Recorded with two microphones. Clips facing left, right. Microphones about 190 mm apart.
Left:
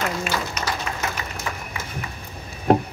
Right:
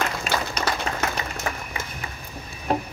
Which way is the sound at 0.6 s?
35° right (ahead or behind).